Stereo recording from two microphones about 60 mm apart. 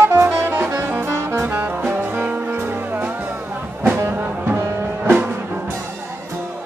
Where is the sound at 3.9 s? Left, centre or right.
Right.